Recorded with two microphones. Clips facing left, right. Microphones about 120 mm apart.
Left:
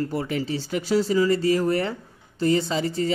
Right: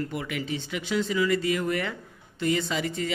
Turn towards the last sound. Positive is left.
turn(degrees=30)  # may be behind; listen again after turning